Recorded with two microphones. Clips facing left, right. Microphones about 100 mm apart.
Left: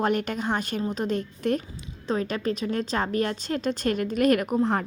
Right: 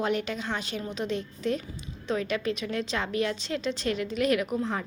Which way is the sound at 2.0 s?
35° left (ahead or behind).